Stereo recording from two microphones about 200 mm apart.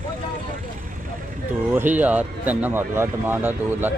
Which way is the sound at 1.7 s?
10° right (ahead or behind).